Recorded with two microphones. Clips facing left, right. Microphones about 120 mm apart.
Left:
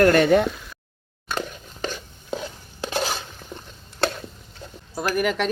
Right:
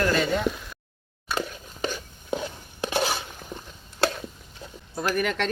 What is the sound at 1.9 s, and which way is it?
Stir, 15° right (ahead or behind).